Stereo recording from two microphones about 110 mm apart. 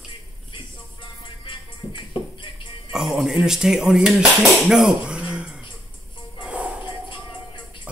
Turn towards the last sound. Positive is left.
turn(degrees=-10)  # may be behind; listen again after turning